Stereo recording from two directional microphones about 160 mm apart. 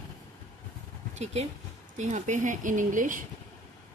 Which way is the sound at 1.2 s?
45° right (ahead or behind).